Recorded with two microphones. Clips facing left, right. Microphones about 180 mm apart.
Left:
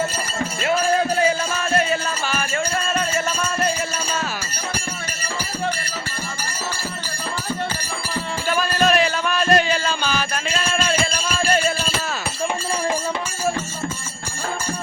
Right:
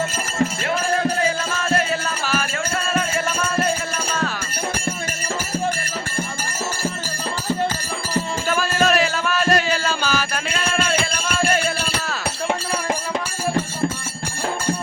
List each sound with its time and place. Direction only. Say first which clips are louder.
1.7 s music: left 1 dB; centre (ahead or behind)
8.4 s music: left 2 dB; centre (ahead or behind)
10.6 s a sound: right 2 dB; 60° right (ahead or behind)